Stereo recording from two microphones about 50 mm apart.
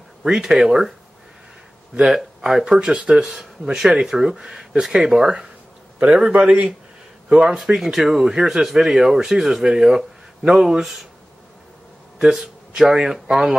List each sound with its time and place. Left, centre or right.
0.2 s speech: centre
2.0 s a man's voice: centre
7.5 s speech: centre
12.2 s speech: centre